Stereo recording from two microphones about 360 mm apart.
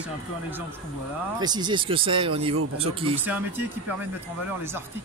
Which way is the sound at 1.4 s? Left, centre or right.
Centre.